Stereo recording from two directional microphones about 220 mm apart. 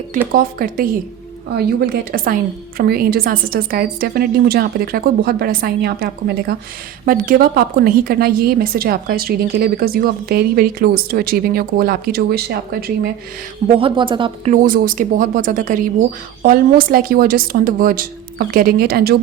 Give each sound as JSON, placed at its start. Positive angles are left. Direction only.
{"t": 0.3, "sound": "a woman's voice", "side_deg": -40}
{"t": 13.7, "sound": "speech", "side_deg": -25}
{"t": 14.5, "sound": "speech", "side_deg": -40}